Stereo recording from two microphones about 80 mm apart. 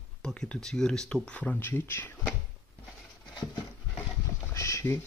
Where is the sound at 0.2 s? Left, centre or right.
Centre.